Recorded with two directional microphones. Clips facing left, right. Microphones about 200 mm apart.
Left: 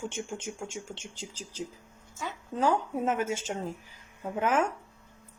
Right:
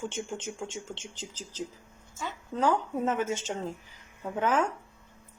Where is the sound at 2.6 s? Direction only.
10° left (ahead or behind).